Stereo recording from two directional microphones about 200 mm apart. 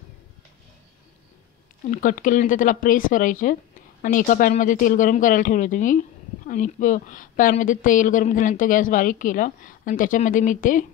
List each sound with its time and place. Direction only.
1.9 s speech: 40° left (ahead or behind)